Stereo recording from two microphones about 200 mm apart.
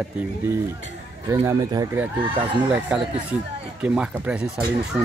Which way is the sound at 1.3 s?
15° right (ahead or behind).